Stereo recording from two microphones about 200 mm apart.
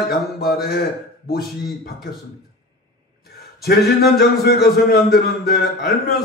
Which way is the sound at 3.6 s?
50° left (ahead or behind).